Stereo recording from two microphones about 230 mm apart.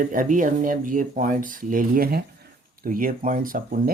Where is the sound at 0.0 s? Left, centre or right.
Right.